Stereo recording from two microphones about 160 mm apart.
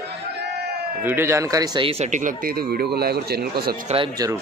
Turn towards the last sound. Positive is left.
turn(degrees=-25)  # may be behind; listen again after turning